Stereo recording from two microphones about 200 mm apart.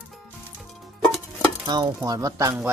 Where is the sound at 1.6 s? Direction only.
20° right (ahead or behind).